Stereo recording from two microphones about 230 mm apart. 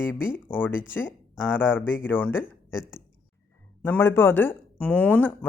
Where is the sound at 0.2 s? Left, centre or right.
Centre.